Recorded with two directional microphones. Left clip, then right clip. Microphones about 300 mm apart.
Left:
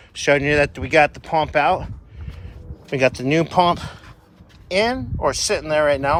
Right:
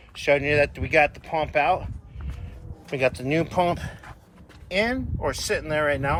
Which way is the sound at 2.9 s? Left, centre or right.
Left.